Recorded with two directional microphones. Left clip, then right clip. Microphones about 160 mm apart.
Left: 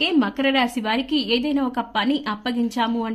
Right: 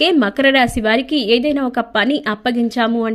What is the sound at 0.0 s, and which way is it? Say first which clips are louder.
A woman's voice: right 7 dB; 35° right (ahead or behind).